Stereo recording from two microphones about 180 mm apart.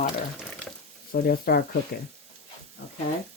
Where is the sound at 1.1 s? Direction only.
55° left (ahead or behind).